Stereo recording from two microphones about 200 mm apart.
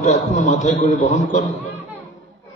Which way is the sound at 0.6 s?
40° left (ahead or behind).